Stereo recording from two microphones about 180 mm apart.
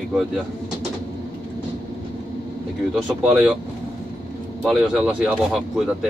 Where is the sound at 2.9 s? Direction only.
Centre (ahead or behind).